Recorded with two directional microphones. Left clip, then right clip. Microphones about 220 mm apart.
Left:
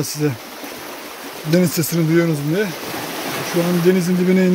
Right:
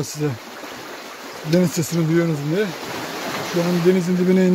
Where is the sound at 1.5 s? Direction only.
5° right (ahead or behind).